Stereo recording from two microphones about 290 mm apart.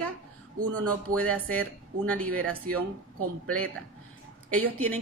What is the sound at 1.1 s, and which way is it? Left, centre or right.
Speech, centre.